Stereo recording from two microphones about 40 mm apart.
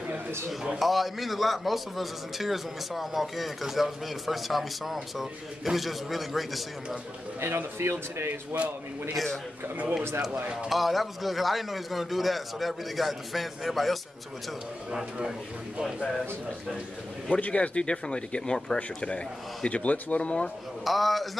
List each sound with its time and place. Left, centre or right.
0.7 s a man's voice: centre
7.3 s speech: right
9.1 s a man's voice: centre
10.7 s a man's voice: centre
17.3 s speech: left
20.8 s a man's voice: centre